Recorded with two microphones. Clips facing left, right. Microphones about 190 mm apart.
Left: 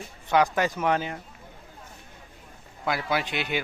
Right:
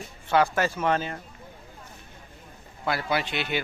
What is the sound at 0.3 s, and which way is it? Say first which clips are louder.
Speech: even; 15° left (ahead or behind).